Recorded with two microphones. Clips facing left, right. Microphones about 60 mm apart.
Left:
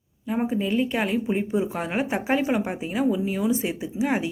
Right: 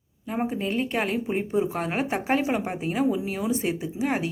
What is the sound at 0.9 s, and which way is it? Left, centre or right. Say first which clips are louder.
Speech: left 2 dB; centre.